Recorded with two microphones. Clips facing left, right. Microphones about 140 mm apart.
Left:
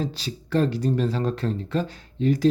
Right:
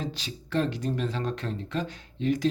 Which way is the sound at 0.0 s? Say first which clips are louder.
Left 5 dB; 35° left (ahead or behind).